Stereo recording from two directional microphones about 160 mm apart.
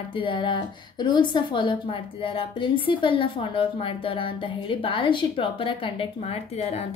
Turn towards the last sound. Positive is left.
turn(degrees=30)  # may be behind; listen again after turning